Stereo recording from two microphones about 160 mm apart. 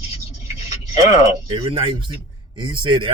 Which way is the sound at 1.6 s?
35° right (ahead or behind).